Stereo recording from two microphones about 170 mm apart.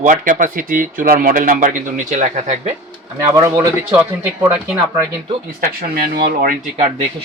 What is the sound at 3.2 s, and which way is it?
Speech, 20° right (ahead or behind).